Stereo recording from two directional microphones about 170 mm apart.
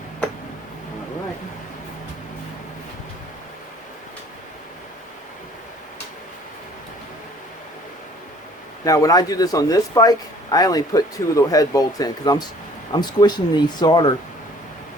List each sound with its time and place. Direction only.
8.8 s speech: 20° left (ahead or behind)